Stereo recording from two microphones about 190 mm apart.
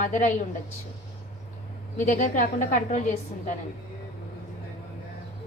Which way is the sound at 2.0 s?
40° left (ahead or behind).